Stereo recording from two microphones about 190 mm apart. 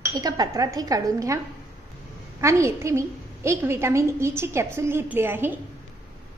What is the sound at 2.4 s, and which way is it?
A woman's voice, 15° right (ahead or behind).